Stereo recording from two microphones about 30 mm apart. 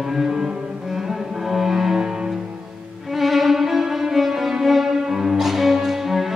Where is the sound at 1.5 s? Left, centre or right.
Centre.